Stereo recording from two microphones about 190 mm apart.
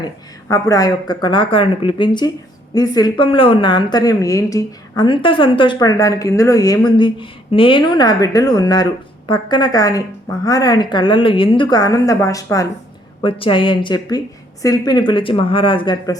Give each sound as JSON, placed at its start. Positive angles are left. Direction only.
{"t": 0.0, "sound": "a woman's voice", "side_deg": 15}